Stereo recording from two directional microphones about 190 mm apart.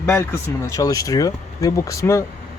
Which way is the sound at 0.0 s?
15° left (ahead or behind).